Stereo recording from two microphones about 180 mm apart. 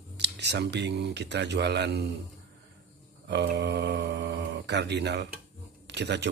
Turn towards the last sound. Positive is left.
turn(degrees=-70)  # may be behind; listen again after turning